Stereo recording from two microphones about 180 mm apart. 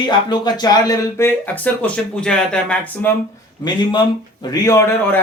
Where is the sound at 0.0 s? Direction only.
25° left (ahead or behind); by 3.1 s 5° left (ahead or behind).